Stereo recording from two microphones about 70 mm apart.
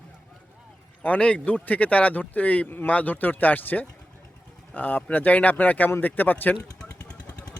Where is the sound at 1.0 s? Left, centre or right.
Centre.